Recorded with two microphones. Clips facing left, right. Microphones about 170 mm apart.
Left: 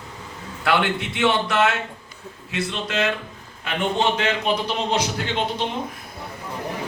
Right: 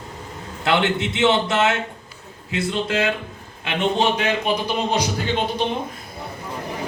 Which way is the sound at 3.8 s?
15° right (ahead or behind).